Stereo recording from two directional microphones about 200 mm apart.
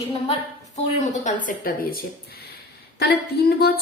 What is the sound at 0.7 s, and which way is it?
Speech, 35° left (ahead or behind).